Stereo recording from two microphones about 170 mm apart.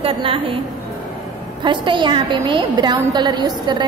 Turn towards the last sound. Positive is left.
turn(degrees=-25)  # may be behind; listen again after turning